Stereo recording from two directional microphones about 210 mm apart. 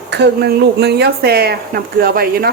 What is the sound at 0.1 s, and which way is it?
Speech, 50° right (ahead or behind).